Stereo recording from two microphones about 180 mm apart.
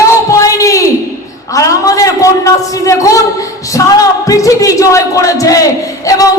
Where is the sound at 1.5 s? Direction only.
20° left (ahead or behind).